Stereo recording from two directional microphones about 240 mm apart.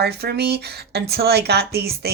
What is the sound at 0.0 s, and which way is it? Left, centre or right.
Speech, right.